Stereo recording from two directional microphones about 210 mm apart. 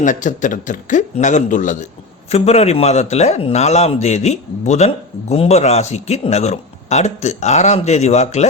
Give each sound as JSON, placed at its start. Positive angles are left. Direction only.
{"t": 0.0, "sound": "speech", "side_deg": 35}